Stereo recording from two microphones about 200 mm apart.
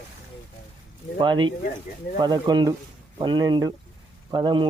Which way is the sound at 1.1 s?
25° right (ahead or behind).